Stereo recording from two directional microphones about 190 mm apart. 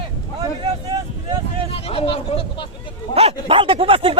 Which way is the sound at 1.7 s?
30° left (ahead or behind).